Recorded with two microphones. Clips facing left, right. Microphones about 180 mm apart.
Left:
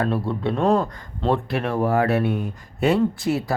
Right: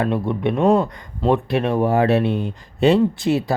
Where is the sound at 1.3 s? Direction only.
20° right (ahead or behind).